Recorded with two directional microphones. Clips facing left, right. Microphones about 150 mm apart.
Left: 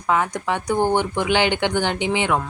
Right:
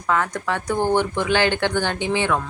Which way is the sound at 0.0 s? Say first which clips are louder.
Left 1 dB; 15° left (ahead or behind).